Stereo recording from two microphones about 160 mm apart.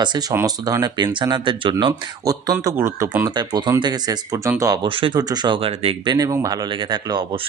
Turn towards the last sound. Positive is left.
turn(degrees=-30)  # may be behind; listen again after turning